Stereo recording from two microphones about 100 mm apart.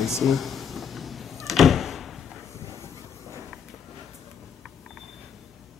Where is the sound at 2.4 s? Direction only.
30° left (ahead or behind).